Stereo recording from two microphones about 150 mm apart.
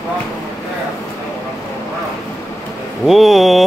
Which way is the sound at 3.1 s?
Centre (ahead or behind).